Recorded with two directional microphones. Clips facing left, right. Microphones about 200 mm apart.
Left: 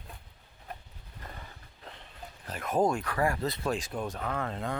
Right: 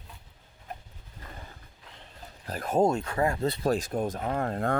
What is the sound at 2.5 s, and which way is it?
Speech, 30° right (ahead or behind).